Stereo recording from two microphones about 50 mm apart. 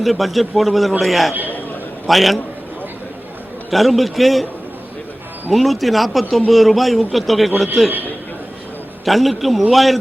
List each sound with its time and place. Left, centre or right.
0.0 s a man's voice: centre
3.7 s a man's voice: centre
5.5 s a man's voice: centre
7.9 s a man's voice: right
9.0 s a man's voice: centre